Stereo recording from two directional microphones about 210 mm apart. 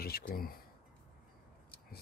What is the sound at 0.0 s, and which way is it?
Speech, 45° left (ahead or behind).